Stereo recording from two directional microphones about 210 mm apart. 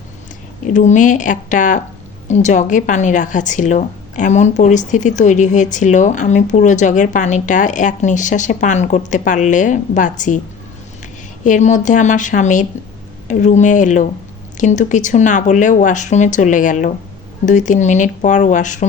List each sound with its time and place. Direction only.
0.7 s speech: 35° left (ahead or behind)
11.4 s speech: 35° left (ahead or behind)